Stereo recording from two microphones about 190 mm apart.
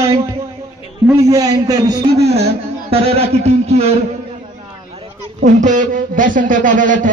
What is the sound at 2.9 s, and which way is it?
A man's voice, 30° right (ahead or behind).